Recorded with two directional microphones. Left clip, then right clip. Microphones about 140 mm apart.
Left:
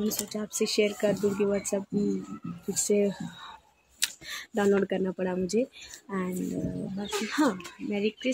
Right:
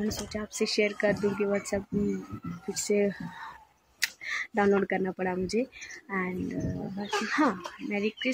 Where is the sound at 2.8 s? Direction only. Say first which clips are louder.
Left 1 dB; 15° left (ahead or behind).